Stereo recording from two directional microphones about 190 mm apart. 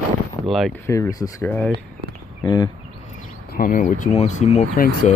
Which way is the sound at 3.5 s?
45° left (ahead or behind).